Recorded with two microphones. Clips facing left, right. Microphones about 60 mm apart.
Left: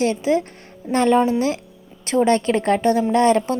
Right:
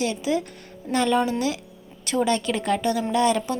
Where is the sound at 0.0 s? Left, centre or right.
Left.